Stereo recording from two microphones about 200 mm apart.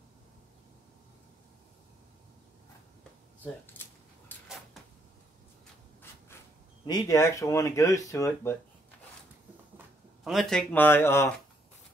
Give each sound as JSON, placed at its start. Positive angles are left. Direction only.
{"t": 3.4, "sound": "a sound", "side_deg": 10}
{"t": 6.9, "sound": "speech", "side_deg": 15}
{"t": 10.2, "sound": "speech", "side_deg": 0}